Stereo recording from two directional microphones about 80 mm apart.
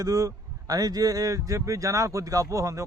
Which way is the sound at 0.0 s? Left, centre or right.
Right.